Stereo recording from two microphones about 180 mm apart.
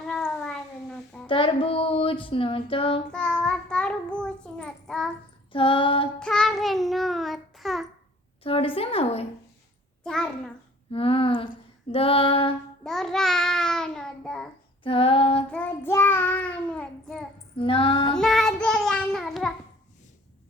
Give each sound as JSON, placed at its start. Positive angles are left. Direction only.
{"t": 0.0, "sound": "cat", "side_deg": 5}
{"t": 1.3, "sound": "child singing", "side_deg": 30}
{"t": 3.1, "sound": "child singing", "side_deg": 5}
{"t": 5.5, "sound": "child singing", "side_deg": 30}
{"t": 6.1, "sound": "child singing", "side_deg": 5}
{"t": 8.4, "sound": "female singing", "side_deg": 30}
{"t": 10.0, "sound": "a child's voice", "side_deg": 5}
{"t": 10.9, "sound": "female singing", "side_deg": 30}
{"t": 12.8, "sound": "child singing", "side_deg": 0}
{"t": 14.8, "sound": "female singing", "side_deg": 30}
{"t": 15.4, "sound": "child singing", "side_deg": 10}
{"t": 17.6, "sound": "female singing", "side_deg": 30}
{"t": 18.1, "sound": "child singing", "side_deg": 0}